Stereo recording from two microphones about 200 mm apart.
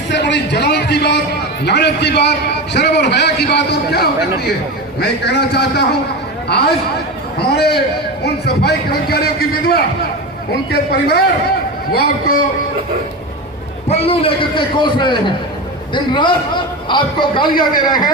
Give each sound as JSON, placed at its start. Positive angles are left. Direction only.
{"t": 0.1, "sound": "a man's voice", "side_deg": 60}
{"t": 13.8, "sound": "a man's voice", "side_deg": 30}
{"t": 16.9, "sound": "a man's voice", "side_deg": 25}